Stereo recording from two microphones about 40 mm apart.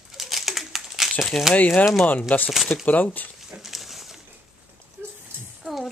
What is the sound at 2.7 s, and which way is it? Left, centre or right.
Speech, left.